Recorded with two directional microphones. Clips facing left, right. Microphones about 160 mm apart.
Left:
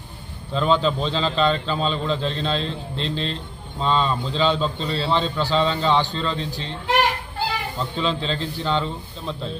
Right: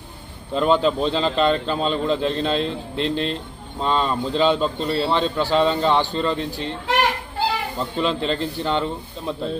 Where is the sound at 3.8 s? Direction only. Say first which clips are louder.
Even; 10° right (ahead or behind).